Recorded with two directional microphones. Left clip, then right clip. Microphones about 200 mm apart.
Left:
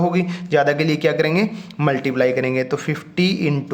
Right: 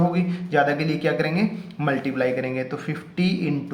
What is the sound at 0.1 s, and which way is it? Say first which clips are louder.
Speech: left 5 dB; 45° left (ahead or behind).